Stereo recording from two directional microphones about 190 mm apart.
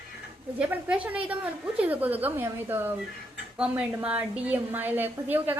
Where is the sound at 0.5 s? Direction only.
5° right (ahead or behind).